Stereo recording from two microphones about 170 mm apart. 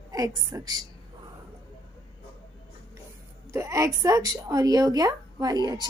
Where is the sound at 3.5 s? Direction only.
15° right (ahead or behind).